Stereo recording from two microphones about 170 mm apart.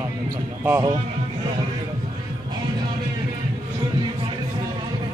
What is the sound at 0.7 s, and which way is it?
Speech, 20° right (ahead or behind).